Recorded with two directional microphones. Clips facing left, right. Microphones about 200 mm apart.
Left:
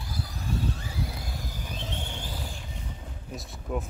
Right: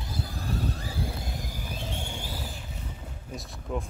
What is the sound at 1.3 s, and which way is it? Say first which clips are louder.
Train: right 1 dB; 10° right (ahead or behind).